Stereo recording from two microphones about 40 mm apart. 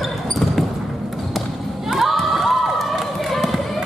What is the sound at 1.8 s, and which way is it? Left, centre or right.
Crowd, centre.